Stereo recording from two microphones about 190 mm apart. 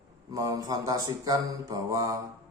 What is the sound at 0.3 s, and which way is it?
Mantra, 20° right (ahead or behind).